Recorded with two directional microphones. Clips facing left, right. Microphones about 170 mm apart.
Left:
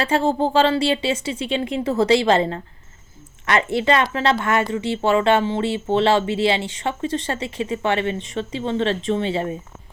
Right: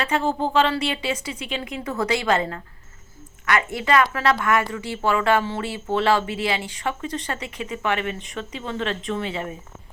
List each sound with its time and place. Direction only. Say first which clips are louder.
0.0 s speech: left 4 dB; 30° left (ahead or behind)